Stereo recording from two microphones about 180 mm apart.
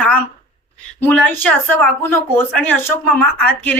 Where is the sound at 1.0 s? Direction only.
10° left (ahead or behind).